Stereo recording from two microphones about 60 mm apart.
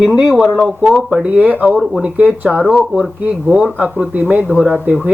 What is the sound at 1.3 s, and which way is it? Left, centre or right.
Speech, right.